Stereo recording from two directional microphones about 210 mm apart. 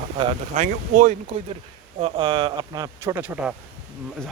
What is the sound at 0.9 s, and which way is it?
Speech, 35° right (ahead or behind).